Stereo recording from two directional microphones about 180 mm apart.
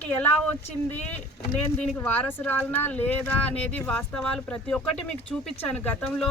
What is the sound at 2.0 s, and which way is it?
Speech, 10° left (ahead or behind).